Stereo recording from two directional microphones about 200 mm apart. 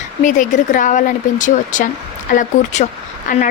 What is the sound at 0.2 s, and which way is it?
Speech, 40° left (ahead or behind).